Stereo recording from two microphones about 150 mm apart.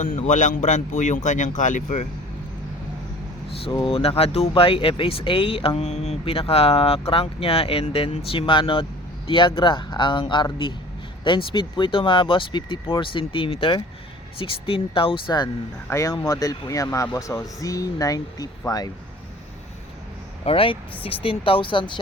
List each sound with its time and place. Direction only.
0.0 s speech: 60° left (ahead or behind)
3.6 s speech: 35° left (ahead or behind)
15.9 s speech: 20° left (ahead or behind)
20.4 s speech: 40° left (ahead or behind)